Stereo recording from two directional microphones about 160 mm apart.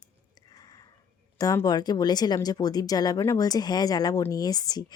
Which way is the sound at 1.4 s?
20° left (ahead or behind).